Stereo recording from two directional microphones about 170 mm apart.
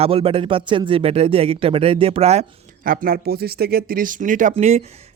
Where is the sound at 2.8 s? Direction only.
55° right (ahead or behind).